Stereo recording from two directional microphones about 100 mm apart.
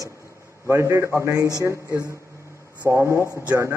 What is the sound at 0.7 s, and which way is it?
Speech, 30° right (ahead or behind).